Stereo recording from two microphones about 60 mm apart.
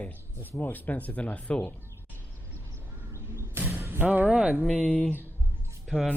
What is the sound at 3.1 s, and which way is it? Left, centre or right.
Crow, right.